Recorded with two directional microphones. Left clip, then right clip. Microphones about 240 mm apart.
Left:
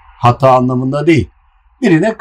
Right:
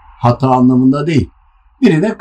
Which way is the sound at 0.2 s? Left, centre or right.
Left.